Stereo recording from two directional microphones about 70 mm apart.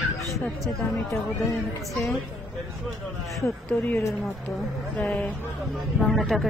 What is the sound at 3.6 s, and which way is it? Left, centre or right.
Speech, centre.